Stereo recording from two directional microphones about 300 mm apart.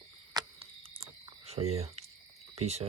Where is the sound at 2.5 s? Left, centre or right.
Right.